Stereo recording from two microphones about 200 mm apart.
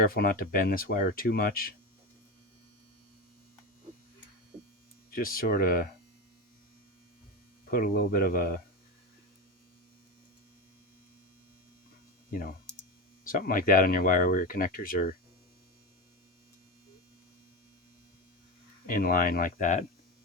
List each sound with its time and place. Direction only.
0.0 s speech: 45° left (ahead or behind)
5.1 s speech: 45° left (ahead or behind)
7.7 s speech: 45° left (ahead or behind)
12.3 s speech: 45° left (ahead or behind)
18.9 s speech: 45° left (ahead or behind)